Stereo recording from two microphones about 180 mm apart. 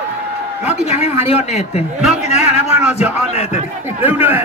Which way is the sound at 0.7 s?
35° left (ahead or behind).